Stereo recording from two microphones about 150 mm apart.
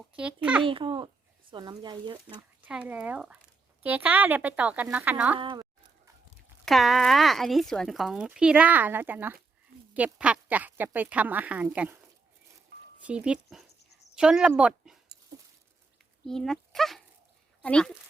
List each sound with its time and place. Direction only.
0.2 s speech: 5° right (ahead or behind)
0.6 s a child's voice: 35° right (ahead or behind)
2.6 s speech: 10° right (ahead or behind)
5.4 s speech: 35° right (ahead or behind)
6.7 s speech: centre (ahead or behind)
13.0 s speech: 10° right (ahead or behind)
16.2 s speech: 5° left (ahead or behind)